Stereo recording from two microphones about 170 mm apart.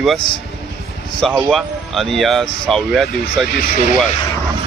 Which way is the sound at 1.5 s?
Centre (ahead or behind).